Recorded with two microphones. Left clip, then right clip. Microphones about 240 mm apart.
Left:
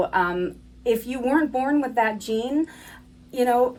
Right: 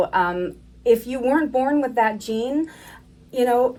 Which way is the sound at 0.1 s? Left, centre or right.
Centre.